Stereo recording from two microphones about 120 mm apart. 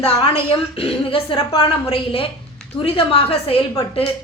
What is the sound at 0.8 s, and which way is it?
A woman's voice, 50° left (ahead or behind).